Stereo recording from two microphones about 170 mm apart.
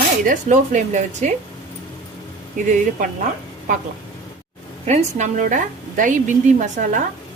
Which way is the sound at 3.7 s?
45° right (ahead or behind).